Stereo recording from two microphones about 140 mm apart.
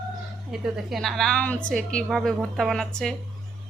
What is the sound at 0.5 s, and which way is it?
A woman's voice, 5° right (ahead or behind).